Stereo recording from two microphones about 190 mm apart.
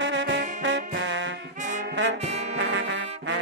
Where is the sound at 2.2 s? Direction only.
35° right (ahead or behind).